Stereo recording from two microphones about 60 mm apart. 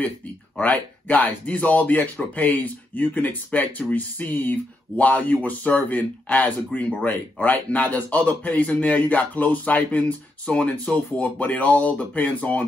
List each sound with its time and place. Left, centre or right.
0.6 s speech: left